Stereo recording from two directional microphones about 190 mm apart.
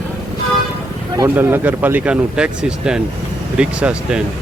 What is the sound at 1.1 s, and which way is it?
Speech, 15° right (ahead or behind).